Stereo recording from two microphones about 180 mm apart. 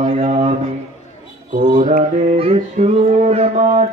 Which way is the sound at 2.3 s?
30° right (ahead or behind).